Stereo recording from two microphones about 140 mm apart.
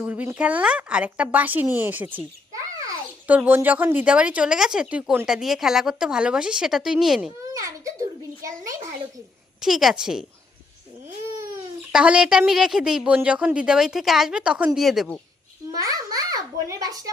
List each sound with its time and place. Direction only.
0.0 s speech: 10° right (ahead or behind)
3.2 s speech: 10° right (ahead or behind)
7.5 s a child's voice: 25° right (ahead or behind)
9.6 s a woman's voice: centre (ahead or behind)
11.9 s a woman's voice: 5° right (ahead or behind)
15.8 s a child's voice: 25° right (ahead or behind)